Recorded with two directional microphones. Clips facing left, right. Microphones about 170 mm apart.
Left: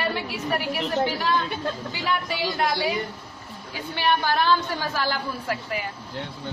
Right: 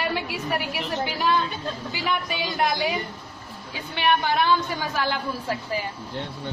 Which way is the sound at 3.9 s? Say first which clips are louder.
Right 1 dB; 15° right (ahead or behind).